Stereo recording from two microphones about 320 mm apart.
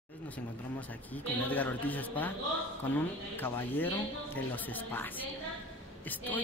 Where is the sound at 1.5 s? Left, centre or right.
Centre.